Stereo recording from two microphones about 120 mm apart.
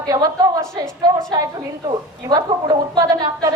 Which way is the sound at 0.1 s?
30° right (ahead or behind).